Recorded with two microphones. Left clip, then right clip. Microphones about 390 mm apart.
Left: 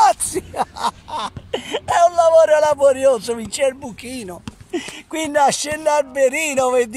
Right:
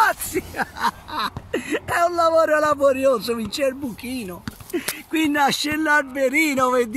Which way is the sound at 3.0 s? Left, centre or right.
Left.